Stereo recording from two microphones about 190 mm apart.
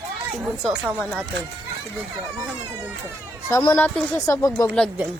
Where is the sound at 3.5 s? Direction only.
10° left (ahead or behind).